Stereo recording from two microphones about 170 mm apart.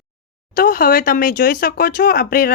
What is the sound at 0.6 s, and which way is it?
Speech, 60° left (ahead or behind).